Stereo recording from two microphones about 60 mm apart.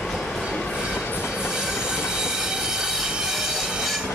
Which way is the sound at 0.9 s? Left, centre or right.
Left.